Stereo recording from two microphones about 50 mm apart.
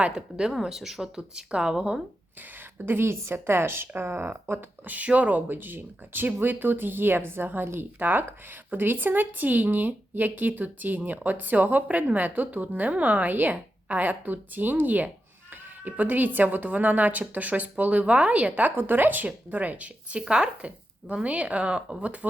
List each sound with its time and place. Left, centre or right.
0.1 s speech: centre
2.8 s speech: right
4.9 s speech: right
5.5 s speech: right
18.8 s speech: right
20.2 s speech: centre